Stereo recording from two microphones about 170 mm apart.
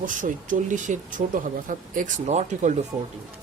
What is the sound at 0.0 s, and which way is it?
Speech, 50° right (ahead or behind).